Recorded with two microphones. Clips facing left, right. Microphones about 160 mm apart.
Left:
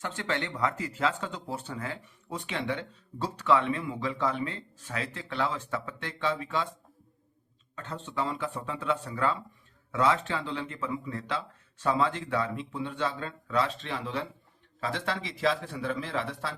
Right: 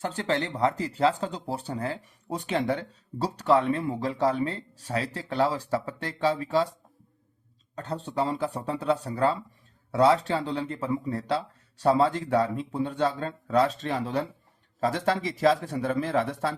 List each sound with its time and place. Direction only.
0.0 s speech: 35° right (ahead or behind)
7.8 s speech: 35° right (ahead or behind)